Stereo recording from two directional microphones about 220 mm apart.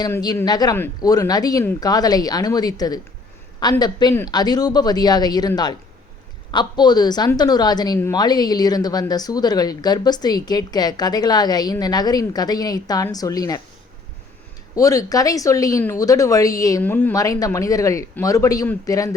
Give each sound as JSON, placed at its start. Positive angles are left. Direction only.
{"t": 0.0, "sound": "a woman's voice", "side_deg": 20}
{"t": 14.8, "sound": "a woman's voice", "side_deg": 15}